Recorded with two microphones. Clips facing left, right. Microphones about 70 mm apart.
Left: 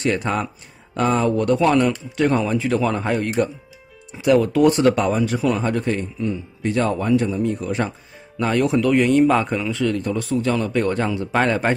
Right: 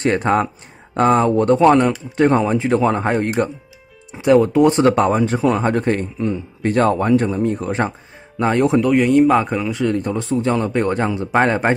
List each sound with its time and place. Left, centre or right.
0.0 s a man's voice: right
8.9 s a man's voice: centre; by 11.7 s right